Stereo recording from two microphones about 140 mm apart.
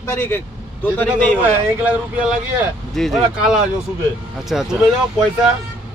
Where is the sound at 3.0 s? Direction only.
Centre (ahead or behind).